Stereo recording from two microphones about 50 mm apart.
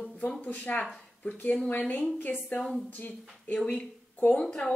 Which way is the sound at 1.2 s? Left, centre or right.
Left.